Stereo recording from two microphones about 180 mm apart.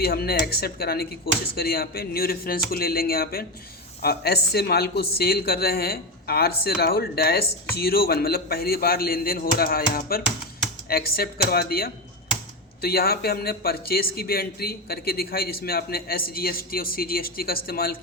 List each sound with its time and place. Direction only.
0.0 s speech: 60° left (ahead or behind)